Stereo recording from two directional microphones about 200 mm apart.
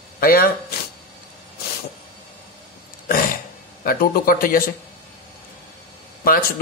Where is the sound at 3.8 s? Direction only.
45° left (ahead or behind).